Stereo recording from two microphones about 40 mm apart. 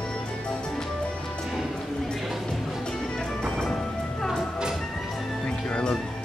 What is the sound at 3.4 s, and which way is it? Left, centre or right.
Music, centre.